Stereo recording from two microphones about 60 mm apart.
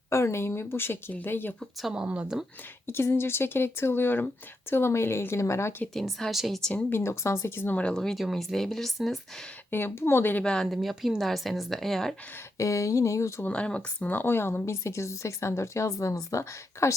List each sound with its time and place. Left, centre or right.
0.1 s speech: left
1.9 s speech: centre
2.8 s speech: left
5.9 s speech: centre
7.0 s speech: left
7.9 s speech: centre
9.7 s speech: left
10.4 s speech: centre
10.7 s speech: centre
12.5 s speech: left
13.4 s speech: left
14.1 s speech: left
14.6 s speech: left